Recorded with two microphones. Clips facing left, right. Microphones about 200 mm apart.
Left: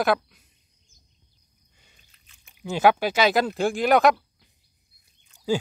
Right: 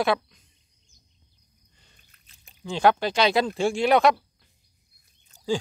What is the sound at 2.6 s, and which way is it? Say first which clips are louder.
Speech: left 1 dB; 5° left (ahead or behind).